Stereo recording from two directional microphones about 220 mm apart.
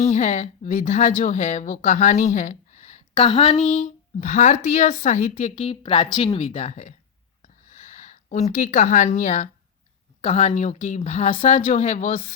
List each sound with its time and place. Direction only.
0.0 s a woman's voice: 35° left (ahead or behind)
7.4 s a sound: 35° left (ahead or behind)
10.2 s a woman's voice: 30° left (ahead or behind)